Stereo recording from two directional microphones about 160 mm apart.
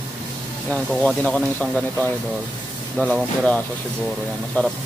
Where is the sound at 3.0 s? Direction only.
5° right (ahead or behind).